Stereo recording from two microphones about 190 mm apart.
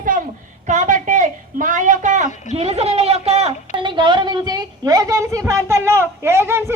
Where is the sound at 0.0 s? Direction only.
45° right (ahead or behind); by 5.4 s 15° right (ahead or behind).